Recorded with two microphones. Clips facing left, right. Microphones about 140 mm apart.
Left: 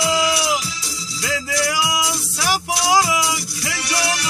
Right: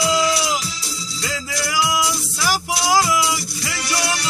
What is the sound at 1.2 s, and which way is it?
Music, 55° left (ahead or behind).